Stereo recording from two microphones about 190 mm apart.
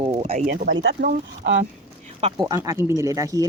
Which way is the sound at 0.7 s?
65° right (ahead or behind).